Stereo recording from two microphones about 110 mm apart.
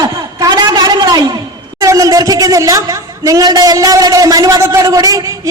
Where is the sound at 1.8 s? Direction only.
30° right (ahead or behind).